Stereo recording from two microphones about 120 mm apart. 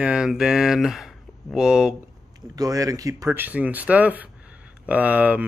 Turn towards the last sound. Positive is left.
turn(degrees=-10)  # may be behind; listen again after turning